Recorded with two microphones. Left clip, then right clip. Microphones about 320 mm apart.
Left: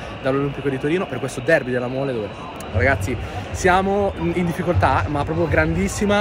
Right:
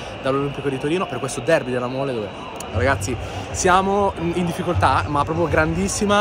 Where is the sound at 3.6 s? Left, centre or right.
Centre.